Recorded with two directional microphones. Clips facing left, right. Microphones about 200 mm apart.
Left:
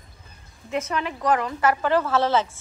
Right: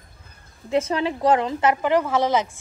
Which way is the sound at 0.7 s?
30° right (ahead or behind).